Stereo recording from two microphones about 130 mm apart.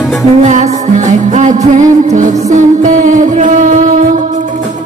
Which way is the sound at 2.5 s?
70° right (ahead or behind).